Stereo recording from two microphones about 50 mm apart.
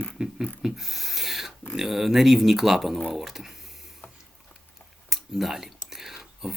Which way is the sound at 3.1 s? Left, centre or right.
Centre.